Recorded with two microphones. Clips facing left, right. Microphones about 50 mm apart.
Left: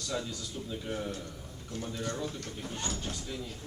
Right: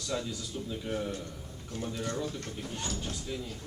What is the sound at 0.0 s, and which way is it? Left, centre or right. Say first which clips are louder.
Speech: right 1 dB; centre.